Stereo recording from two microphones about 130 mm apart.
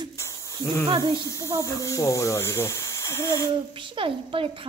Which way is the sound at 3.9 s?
40° right (ahead or behind).